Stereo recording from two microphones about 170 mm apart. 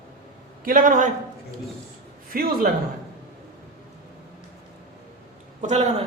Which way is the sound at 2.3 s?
60° right (ahead or behind).